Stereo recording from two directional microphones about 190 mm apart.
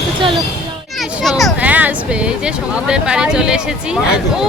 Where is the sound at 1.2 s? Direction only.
Centre (ahead or behind).